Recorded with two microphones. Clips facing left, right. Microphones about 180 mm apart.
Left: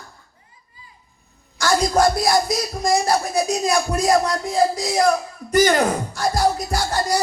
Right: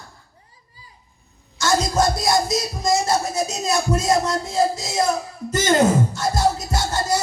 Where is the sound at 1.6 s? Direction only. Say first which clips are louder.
Left 2 dB; 20° right (ahead or behind).